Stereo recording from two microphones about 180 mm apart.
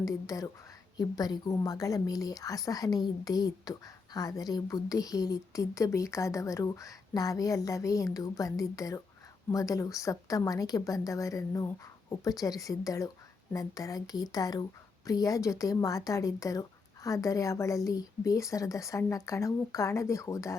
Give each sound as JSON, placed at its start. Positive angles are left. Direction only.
{"t": 0.0, "sound": "a woman's voice", "side_deg": 20}